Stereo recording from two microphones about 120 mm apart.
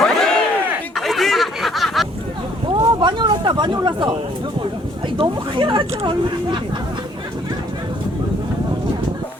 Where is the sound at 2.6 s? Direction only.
40° right (ahead or behind).